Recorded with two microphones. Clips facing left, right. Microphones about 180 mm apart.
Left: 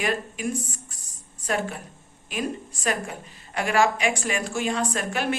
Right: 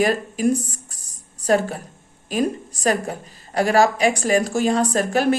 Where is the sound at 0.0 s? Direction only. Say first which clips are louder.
Right 8 dB; 40° right (ahead or behind).